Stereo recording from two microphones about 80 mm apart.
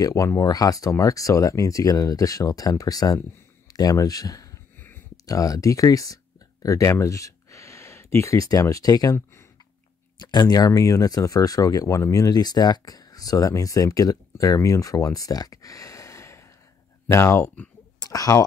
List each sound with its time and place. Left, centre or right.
0.0 s speech: left
10.2 s speech: left
18.0 s speech: left